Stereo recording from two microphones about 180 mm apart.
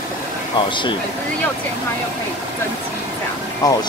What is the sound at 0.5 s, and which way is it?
Speech, 25° left (ahead or behind).